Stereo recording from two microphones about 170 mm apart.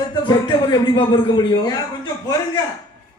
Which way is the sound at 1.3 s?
25° left (ahead or behind).